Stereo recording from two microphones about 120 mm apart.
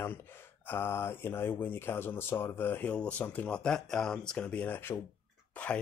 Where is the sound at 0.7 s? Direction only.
20° left (ahead or behind).